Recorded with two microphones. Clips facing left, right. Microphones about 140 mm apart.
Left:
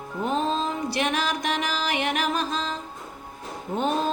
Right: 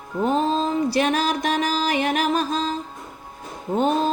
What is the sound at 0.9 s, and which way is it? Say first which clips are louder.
Music: right 5 dB; 35° right (ahead or behind).